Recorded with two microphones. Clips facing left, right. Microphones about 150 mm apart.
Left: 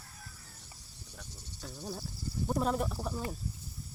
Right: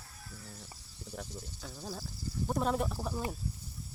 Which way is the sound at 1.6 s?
Centre (ahead or behind).